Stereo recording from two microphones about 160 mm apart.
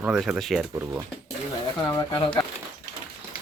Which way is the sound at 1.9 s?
30° left (ahead or behind).